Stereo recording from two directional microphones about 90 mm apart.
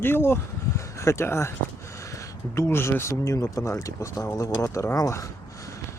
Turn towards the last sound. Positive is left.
turn(degrees=35)  # may be behind; listen again after turning